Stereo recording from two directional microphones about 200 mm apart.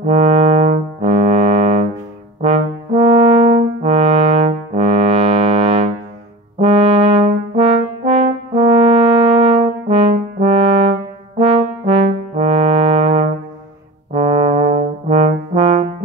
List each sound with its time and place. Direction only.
0.0 s brass instrument: 30° right (ahead or behind)